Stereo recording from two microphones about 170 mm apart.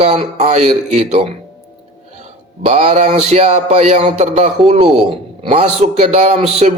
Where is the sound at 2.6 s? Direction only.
40° right (ahead or behind).